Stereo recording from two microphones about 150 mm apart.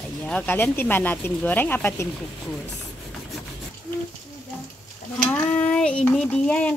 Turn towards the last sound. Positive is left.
turn(degrees=10)  # may be behind; listen again after turning